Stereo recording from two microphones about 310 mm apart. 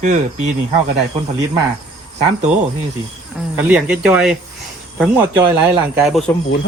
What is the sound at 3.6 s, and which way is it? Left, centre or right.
Speech, centre.